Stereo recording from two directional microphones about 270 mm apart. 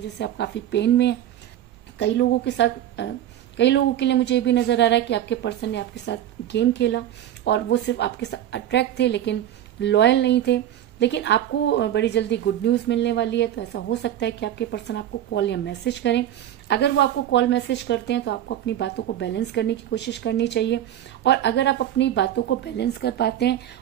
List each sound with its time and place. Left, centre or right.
0.2 s a woman's voice: left